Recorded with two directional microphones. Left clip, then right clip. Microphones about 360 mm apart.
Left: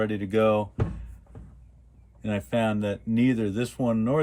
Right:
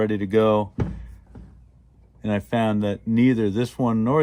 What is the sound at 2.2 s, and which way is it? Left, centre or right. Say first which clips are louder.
Speech: right 3 dB; centre.